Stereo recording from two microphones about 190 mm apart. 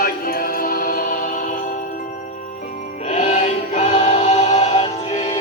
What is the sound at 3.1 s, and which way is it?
Music, 35° left (ahead or behind).